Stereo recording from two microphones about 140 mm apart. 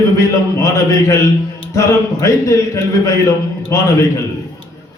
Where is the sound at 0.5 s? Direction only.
20° left (ahead or behind).